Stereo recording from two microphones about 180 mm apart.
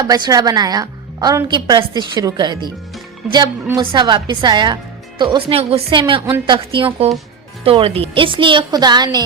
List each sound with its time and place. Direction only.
0.0 s speech: 20° right (ahead or behind)